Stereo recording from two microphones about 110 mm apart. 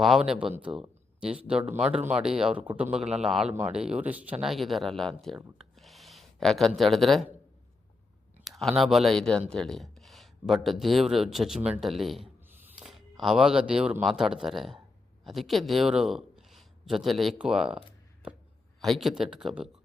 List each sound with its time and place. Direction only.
0.0 s speech: 5° right (ahead or behind)
4.4 s speech: centre (ahead or behind)
5.5 s a sound: centre (ahead or behind)
8.4 s speech: centre (ahead or behind)
12.5 s a sound: 20° right (ahead or behind)
12.8 s speech: centre (ahead or behind)
18.8 s speech: centre (ahead or behind)